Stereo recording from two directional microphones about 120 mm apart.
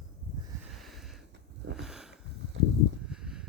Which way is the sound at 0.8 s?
Centre (ahead or behind).